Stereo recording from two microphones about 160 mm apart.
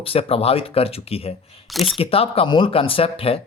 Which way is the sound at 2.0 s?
35° left (ahead or behind).